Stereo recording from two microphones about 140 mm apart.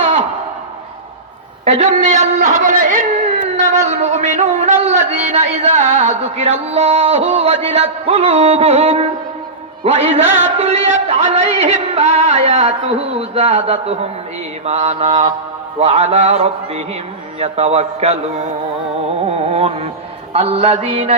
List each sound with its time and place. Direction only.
1.6 s a man's voice: 50° right (ahead or behind); by 3.1 s 70° right (ahead or behind)
3.6 s music: 55° right (ahead or behind)
10.2 s music: 15° right (ahead or behind)
10.6 s music: 50° right (ahead or behind)
19.3 s carnatic music: 45° right (ahead or behind)
20.3 s music: 50° right (ahead or behind)